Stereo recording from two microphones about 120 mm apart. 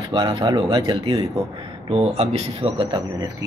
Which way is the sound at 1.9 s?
55° right (ahead or behind).